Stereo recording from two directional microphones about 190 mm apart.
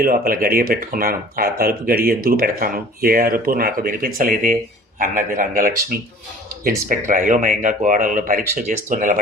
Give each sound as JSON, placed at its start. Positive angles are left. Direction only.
{"t": 0.0, "sound": "speech", "side_deg": -50}